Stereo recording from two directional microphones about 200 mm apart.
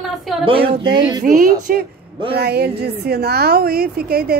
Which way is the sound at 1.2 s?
45° right (ahead or behind).